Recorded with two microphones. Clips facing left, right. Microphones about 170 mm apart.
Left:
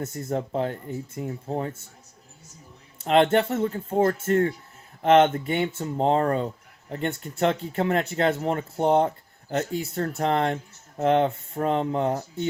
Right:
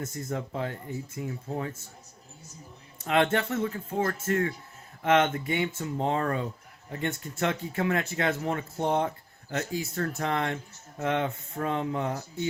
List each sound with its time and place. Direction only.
0.0 s speech: 35° left (ahead or behind)
3.1 s speech: 30° left (ahead or behind)